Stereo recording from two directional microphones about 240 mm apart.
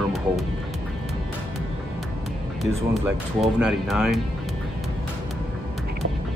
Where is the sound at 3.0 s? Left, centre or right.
Centre.